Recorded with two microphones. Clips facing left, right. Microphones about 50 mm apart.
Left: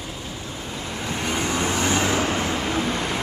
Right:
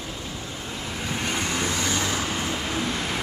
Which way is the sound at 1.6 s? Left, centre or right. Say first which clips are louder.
Left 4 dB; left.